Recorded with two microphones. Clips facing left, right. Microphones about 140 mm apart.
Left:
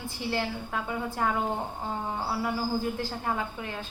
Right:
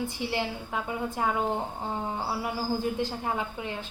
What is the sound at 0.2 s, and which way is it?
A woman's voice, 20° right (ahead or behind).